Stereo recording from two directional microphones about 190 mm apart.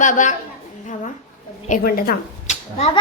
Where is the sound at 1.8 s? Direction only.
50° left (ahead or behind).